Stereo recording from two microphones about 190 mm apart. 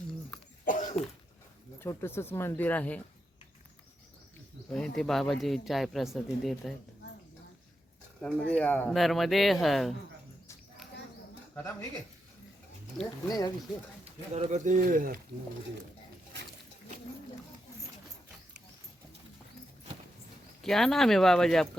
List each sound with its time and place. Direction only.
0.6 s cough: 45° left (ahead or behind)
1.8 s speech: 15° left (ahead or behind)
4.7 s speech: 5° left (ahead or behind)
8.2 s speech: 5° left (ahead or behind)
11.5 s speech: 15° left (ahead or behind)
13.2 s speech: 20° left (ahead or behind)
14.0 s speech: 35° right (ahead or behind)
20.6 s speech: centre (ahead or behind)